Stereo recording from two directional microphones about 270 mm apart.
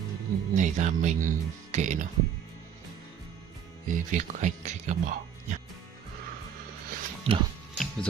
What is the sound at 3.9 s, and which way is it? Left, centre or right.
Speech, right.